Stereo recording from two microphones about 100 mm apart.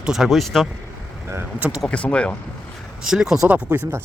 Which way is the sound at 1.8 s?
10° left (ahead or behind).